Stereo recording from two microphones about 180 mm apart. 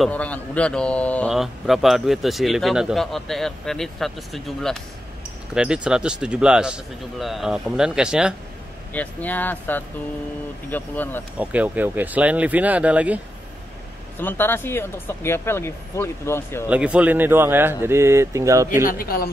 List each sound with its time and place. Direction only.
0.0 s a man's voice: 10° left (ahead or behind)
8.9 s speech: 10° left (ahead or behind)
11.3 s speech: 10° right (ahead or behind)
14.2 s speech: 10° left (ahead or behind)
16.6 s speech: 5° right (ahead or behind)
18.9 s speech: 55° left (ahead or behind)